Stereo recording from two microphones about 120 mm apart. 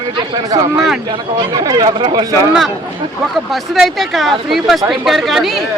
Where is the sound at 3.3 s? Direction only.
Centre (ahead or behind).